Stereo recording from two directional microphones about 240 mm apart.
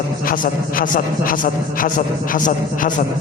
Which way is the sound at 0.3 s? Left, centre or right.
Left.